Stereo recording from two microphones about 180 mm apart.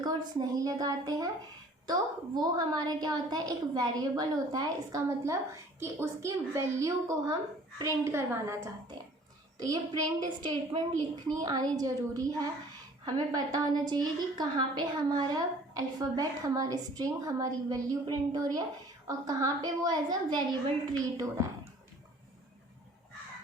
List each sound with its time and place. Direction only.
0.0 s a woman's voice: 20° right (ahead or behind)